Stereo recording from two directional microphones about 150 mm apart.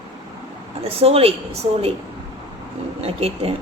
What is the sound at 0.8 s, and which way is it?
A woman's voice, 40° right (ahead or behind).